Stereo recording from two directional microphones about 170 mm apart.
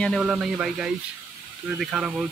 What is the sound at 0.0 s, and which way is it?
Speech, centre (ahead or behind).